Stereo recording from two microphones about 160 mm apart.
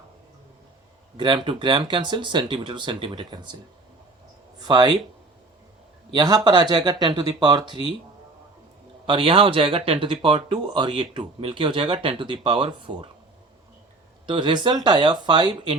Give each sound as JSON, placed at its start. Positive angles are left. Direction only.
{"t": 1.1, "sound": "speech", "side_deg": -30}
{"t": 4.6, "sound": "speech", "side_deg": -25}
{"t": 6.1, "sound": "speech", "side_deg": -25}
{"t": 9.0, "sound": "speech", "side_deg": -35}
{"t": 14.3, "sound": "speech", "side_deg": -30}